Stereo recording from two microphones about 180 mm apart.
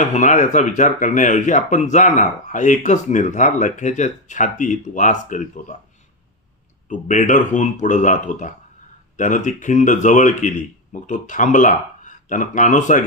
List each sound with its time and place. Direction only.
0.0 s speech: 45° left (ahead or behind)
6.8 s speech: 45° left (ahead or behind)